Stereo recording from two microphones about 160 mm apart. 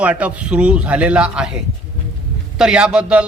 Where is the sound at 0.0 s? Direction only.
10° right (ahead or behind).